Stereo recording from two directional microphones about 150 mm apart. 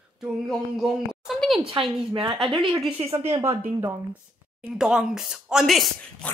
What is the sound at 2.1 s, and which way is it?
A woman's voice, 35° right (ahead or behind).